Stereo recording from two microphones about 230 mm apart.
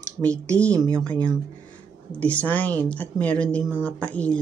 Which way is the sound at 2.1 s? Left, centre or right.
Centre.